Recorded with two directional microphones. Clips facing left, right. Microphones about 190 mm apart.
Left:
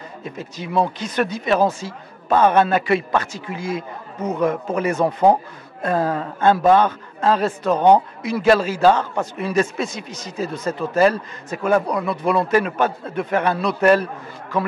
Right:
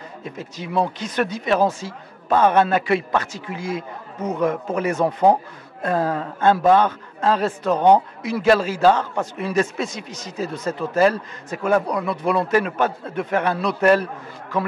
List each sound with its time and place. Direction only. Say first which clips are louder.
1.1 s a man's voice: left 1 dB; 10° left (ahead or behind)
4.2 s speech: left 1 dB; 20° left (ahead or behind)
5.8 s a man's voice: left 1 dB; 15° left (ahead or behind)
8.8 s a man's voice: left 1 dB; 25° left (ahead or behind)